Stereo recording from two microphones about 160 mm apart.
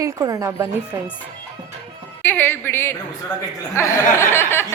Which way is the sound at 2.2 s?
10° left (ahead or behind).